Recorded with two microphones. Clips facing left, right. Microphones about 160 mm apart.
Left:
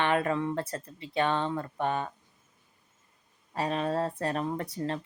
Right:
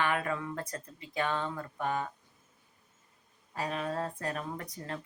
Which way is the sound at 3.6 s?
30° left (ahead or behind).